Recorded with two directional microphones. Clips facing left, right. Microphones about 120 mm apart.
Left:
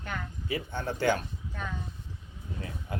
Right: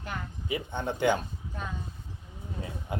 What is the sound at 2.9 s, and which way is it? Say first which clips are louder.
Speech: right 2 dB; 20° right (ahead or behind).